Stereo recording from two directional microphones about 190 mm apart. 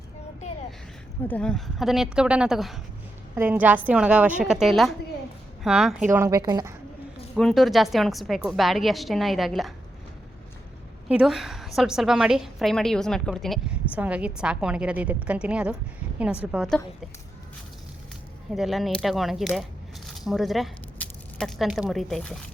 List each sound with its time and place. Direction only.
1.3 s a woman's voice: 5° left (ahead or behind)
6.1 s speech: 15° right (ahead or behind)
7.3 s a woman's voice: centre (ahead or behind)
11.1 s a woman's voice: 5° right (ahead or behind)
18.5 s a woman's voice: centre (ahead or behind)